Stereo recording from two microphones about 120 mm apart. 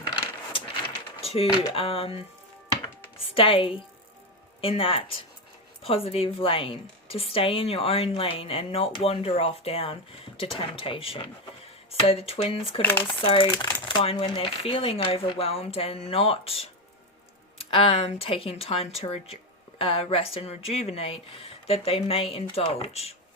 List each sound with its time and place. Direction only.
1.2 s a sound: 55° left (ahead or behind)
1.5 s a woman's voice: 40° left (ahead or behind)
12.8 s speech: 15° left (ahead or behind)
13.1 s a woman's voice: 50° left (ahead or behind)